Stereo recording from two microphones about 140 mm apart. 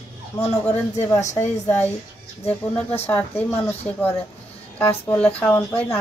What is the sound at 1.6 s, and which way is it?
Speech, 15° left (ahead or behind).